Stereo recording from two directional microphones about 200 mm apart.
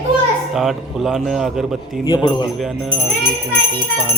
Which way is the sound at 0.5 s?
Centre (ahead or behind).